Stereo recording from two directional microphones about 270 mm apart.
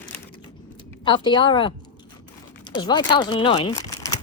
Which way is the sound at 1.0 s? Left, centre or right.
Centre.